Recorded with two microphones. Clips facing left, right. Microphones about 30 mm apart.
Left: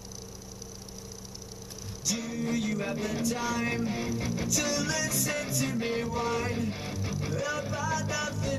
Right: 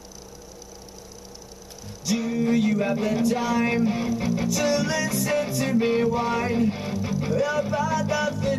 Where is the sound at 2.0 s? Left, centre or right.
Right.